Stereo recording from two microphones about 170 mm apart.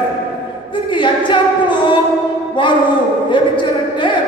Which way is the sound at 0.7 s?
30° left (ahead or behind).